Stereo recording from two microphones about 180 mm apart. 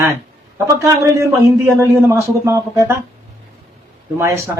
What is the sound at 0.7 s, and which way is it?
A man's voice, 20° right (ahead or behind).